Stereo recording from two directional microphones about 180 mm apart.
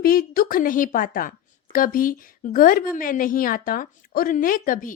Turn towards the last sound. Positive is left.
turn(degrees=50)  # may be behind; listen again after turning